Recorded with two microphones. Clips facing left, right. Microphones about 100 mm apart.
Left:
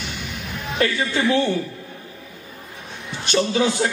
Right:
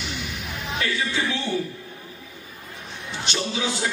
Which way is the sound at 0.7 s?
50° left (ahead or behind).